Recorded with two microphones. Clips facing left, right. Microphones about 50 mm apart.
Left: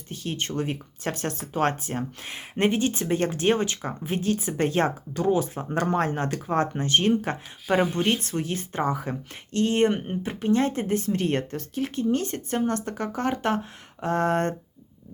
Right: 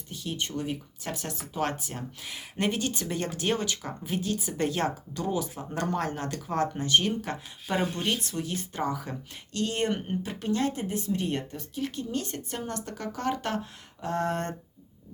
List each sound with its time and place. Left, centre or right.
0.1 s speech: left
7.7 s speech: centre
7.9 s speech: left
11.8 s speech: left